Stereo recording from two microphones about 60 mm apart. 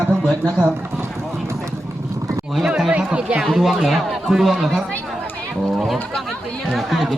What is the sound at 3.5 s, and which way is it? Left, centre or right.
Speech, centre.